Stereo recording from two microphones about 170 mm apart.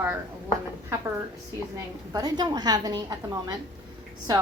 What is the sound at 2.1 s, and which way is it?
A woman's voice, 25° right (ahead or behind).